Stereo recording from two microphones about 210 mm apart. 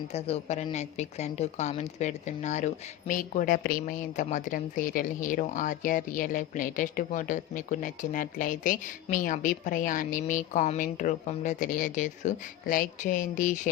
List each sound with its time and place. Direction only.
0.1 s a woman's voice: 30° left (ahead or behind)